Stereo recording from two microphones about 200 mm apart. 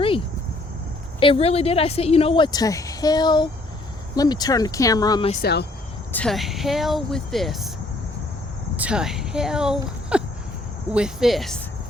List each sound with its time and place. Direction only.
1.2 s a woman's voice: 30° left (ahead or behind)
5.4 s speech: 55° left (ahead or behind)
6.1 s speech: 5° left (ahead or behind)
8.7 s speech: 5° right (ahead or behind)